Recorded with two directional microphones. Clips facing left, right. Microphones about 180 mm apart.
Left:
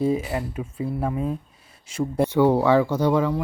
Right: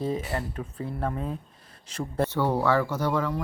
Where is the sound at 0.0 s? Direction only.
10° left (ahead or behind).